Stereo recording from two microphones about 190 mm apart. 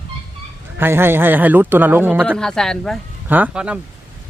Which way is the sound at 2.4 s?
5° left (ahead or behind).